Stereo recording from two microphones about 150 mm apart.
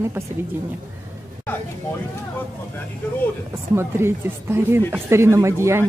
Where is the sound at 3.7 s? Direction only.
15° right (ahead or behind).